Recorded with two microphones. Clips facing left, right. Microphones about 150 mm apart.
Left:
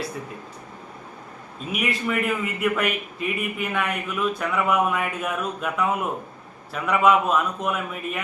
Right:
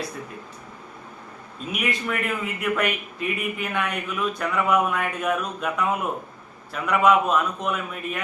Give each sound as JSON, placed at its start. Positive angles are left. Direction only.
{"t": 1.6, "sound": "a man's voice", "side_deg": 0}